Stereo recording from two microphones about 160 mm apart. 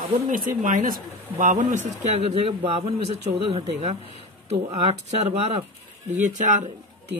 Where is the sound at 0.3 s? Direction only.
55° right (ahead or behind).